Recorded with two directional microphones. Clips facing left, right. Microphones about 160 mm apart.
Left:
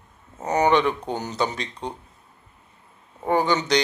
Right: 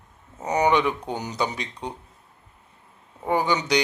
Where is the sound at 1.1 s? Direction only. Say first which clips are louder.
Left 2 dB; 10° right (ahead or behind).